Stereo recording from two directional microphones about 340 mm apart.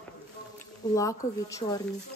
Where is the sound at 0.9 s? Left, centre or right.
Centre.